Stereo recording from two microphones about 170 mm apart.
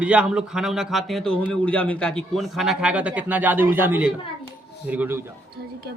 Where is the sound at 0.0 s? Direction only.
5° right (ahead or behind).